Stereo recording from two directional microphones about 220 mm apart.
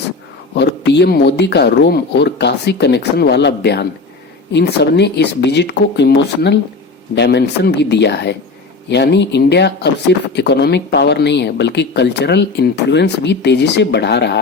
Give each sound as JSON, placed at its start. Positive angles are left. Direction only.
{"t": 0.5, "sound": "speech", "side_deg": 50}